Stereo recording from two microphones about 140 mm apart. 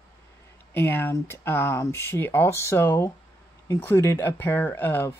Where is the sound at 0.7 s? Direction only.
15° left (ahead or behind).